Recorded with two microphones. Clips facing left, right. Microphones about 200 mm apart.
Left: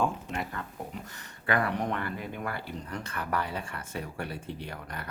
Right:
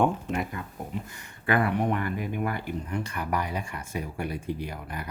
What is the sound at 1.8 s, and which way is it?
Speech, 15° right (ahead or behind).